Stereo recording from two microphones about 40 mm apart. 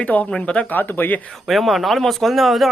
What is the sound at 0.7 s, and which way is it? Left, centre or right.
Speech, left.